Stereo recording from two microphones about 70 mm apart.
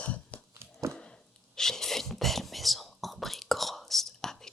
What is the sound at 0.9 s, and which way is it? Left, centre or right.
Whispering, centre.